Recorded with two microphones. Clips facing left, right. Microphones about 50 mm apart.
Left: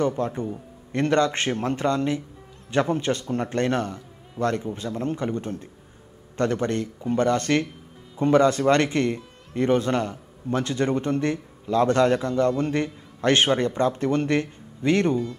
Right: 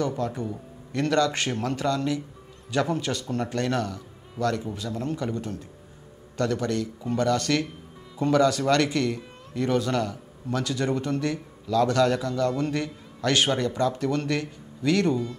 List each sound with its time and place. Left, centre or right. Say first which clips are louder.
0.0 s a man's voice: left 3 dB; left